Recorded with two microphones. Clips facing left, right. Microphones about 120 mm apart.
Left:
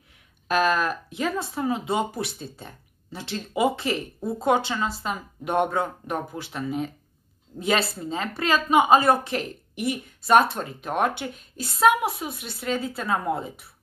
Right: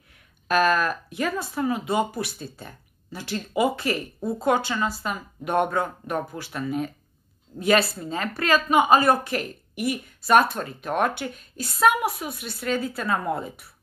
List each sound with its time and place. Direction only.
0.5 s speech: 25° left (ahead or behind)